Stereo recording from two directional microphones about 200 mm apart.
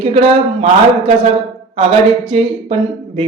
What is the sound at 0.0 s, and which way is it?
A man's voice, 30° right (ahead or behind).